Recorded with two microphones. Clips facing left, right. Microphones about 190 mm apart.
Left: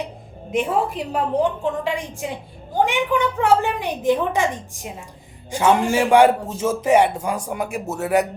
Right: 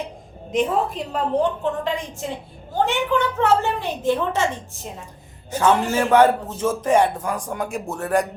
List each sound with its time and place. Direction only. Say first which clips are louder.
0.5 s a man's voice: even; 10° left (ahead or behind)